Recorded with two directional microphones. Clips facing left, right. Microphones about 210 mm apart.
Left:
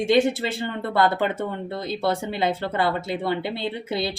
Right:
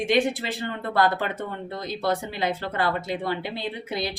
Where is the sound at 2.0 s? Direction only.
25° left (ahead or behind).